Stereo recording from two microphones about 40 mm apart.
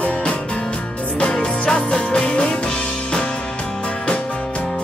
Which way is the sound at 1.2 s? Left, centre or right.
Left.